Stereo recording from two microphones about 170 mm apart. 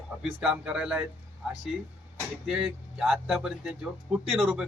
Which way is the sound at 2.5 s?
5° right (ahead or behind).